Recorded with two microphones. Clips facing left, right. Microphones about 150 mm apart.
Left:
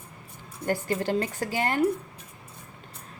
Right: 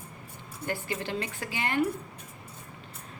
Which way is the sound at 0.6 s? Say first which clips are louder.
Left 6 dB; 45° left (ahead or behind).